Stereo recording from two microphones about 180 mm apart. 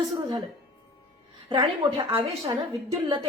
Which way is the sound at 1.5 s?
25° right (ahead or behind).